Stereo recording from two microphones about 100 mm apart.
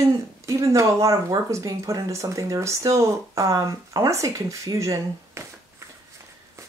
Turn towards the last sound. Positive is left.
turn(degrees=-35)  # may be behind; listen again after turning